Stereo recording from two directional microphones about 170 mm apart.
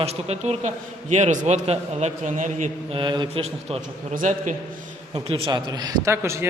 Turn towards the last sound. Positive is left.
turn(degrees=-15)  # may be behind; listen again after turning